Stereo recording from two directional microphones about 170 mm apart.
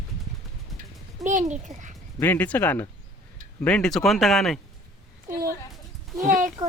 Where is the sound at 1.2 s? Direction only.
45° right (ahead or behind).